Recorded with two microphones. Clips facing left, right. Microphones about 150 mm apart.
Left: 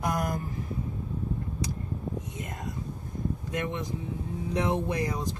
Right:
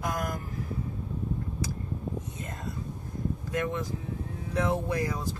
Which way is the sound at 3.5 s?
20° left (ahead or behind).